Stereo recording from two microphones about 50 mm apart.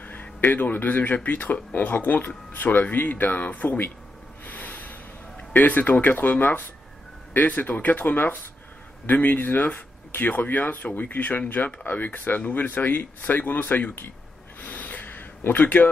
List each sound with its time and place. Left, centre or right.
0.0 s speech: left
4.5 s snort: left
5.5 s speech: left
14.6 s a sound: left